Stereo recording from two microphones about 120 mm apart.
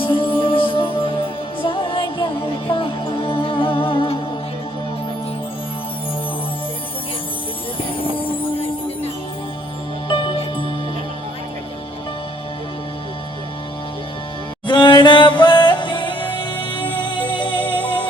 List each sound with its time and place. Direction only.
0.0 s music: 45° left (ahead or behind)
10.1 s music: 45° left (ahead or behind)
14.7 s music: 40° left (ahead or behind)